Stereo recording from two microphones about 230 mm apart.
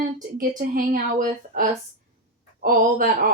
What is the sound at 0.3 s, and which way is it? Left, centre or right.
A woman's voice, right.